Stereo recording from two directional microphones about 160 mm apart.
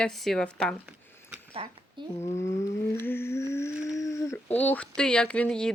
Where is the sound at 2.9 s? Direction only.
15° left (ahead or behind).